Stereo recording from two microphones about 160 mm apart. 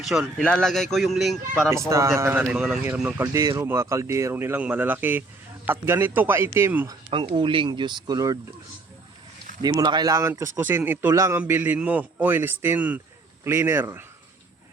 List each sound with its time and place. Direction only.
0.0 s speech: centre (ahead or behind)
1.9 s a man's voice: 15° right (ahead or behind)
3.3 s a man's voice: 20° right (ahead or behind)
7.3 s speech: 30° right (ahead or behind)
9.6 s a man's voice: 25° right (ahead or behind)